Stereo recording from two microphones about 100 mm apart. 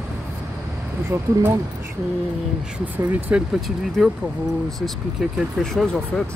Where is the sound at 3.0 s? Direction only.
20° right (ahead or behind).